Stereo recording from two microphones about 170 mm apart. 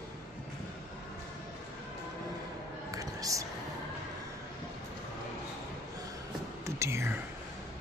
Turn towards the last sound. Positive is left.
turn(degrees=-15)  # may be behind; listen again after turning